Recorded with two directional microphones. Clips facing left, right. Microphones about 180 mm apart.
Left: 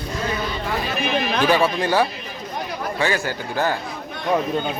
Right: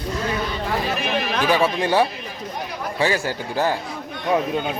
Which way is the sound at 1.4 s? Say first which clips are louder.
Left 1 dB; 10° right (ahead or behind).